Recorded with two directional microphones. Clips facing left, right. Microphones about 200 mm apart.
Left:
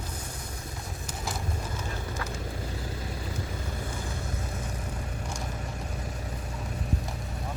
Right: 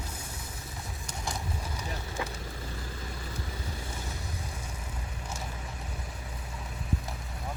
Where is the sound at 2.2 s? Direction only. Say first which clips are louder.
Right 4 dB; 20° right (ahead or behind).